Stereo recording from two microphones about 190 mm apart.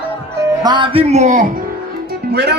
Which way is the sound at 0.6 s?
25° right (ahead or behind).